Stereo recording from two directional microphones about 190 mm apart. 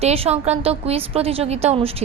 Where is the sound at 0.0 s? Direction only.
35° right (ahead or behind).